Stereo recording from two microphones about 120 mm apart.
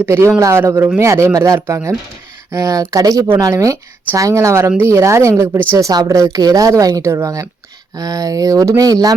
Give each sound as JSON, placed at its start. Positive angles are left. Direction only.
{"t": 0.0, "sound": "a woman's voice", "side_deg": -25}